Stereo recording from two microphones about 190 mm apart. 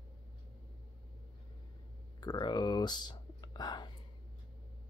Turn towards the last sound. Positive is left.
turn(degrees=25)  # may be behind; listen again after turning